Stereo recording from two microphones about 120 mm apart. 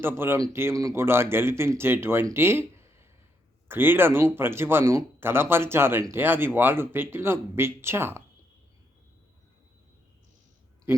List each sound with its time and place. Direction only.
0.0 s speech: 20° right (ahead or behind)